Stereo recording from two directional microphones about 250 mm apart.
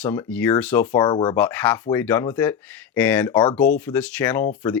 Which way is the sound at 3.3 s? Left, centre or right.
Centre.